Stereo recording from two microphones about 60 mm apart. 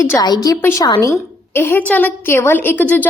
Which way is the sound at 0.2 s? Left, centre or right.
Left.